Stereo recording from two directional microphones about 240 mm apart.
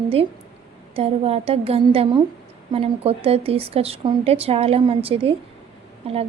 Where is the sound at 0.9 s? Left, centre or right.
Right.